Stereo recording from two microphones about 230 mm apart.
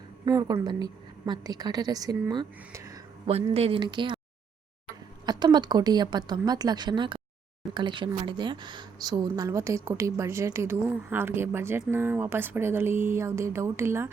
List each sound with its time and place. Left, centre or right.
0.3 s speech: centre
3.2 s speech: right
5.2 s speech: centre